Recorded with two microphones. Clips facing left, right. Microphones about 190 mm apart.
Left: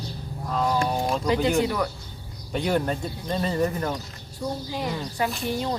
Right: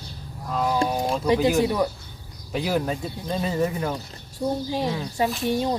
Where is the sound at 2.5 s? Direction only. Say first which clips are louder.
Even; 5° right (ahead or behind).